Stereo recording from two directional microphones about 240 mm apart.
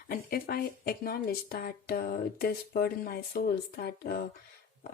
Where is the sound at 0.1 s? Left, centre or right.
Left.